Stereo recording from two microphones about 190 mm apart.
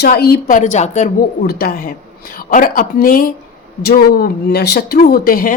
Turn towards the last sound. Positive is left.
turn(degrees=50)  # may be behind; listen again after turning